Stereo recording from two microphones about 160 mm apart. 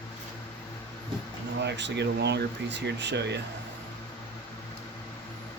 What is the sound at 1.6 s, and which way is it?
Speech, 90° right.